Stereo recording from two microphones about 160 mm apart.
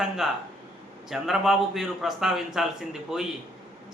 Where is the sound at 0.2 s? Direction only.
5° right (ahead or behind).